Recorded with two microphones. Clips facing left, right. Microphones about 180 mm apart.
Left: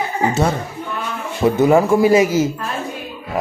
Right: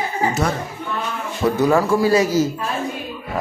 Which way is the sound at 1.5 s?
20° left (ahead or behind).